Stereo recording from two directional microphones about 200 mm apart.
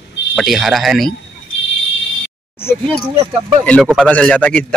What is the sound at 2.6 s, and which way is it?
Speech, 10° left (ahead or behind).